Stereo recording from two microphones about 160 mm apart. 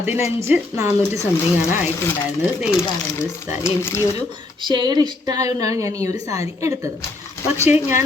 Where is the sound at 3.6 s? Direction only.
15° left (ahead or behind).